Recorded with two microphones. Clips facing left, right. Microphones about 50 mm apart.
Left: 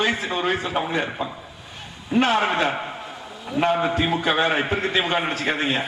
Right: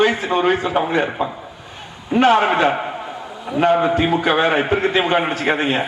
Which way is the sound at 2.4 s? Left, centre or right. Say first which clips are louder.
Right 5 dB; right.